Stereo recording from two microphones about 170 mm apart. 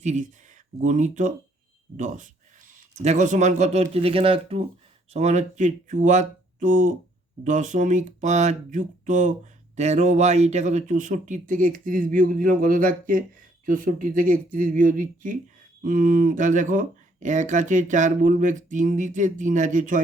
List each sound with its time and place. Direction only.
0.0 s speech: 45° right (ahead or behind)